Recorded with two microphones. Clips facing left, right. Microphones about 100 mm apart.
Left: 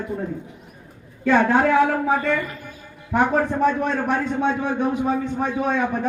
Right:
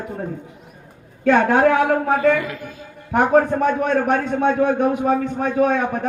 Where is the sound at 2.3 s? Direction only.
90° right.